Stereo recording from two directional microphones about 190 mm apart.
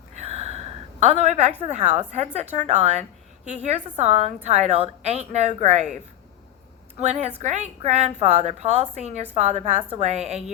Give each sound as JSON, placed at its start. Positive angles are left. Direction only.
{"t": 0.2, "sound": "a sound", "side_deg": -35}
{"t": 1.7, "sound": "a woman's voice", "side_deg": -35}
{"t": 7.0, "sound": "a woman's voice", "side_deg": -35}